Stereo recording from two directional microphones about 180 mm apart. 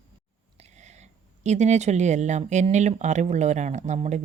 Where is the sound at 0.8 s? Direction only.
40° right (ahead or behind).